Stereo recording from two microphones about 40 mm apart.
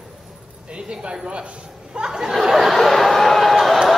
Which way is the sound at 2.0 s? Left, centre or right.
Centre.